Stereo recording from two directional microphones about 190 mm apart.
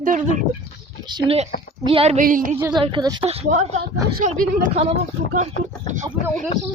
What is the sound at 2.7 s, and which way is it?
Speech, 25° right (ahead or behind).